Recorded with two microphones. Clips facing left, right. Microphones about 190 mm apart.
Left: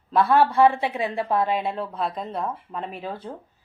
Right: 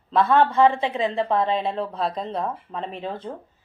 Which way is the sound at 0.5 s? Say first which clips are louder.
Even; 15° left (ahead or behind).